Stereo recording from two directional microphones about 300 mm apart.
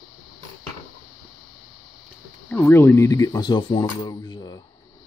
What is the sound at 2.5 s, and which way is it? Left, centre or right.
Speech, centre.